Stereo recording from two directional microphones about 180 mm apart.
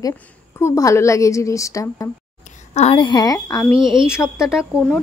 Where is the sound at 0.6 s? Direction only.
15° left (ahead or behind).